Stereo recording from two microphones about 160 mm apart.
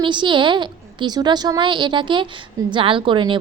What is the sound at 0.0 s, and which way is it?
A woman's voice, 30° right (ahead or behind).